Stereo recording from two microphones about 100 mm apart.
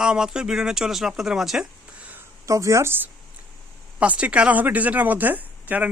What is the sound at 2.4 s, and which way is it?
A man's voice, 35° right (ahead or behind).